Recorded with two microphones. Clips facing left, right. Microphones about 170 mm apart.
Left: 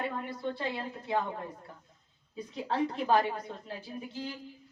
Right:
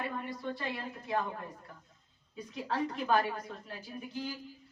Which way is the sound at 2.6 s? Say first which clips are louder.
Left 3 dB; 30° left (ahead or behind).